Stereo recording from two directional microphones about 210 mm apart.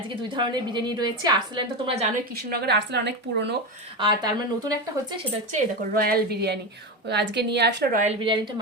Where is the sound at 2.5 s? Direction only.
50° right (ahead or behind).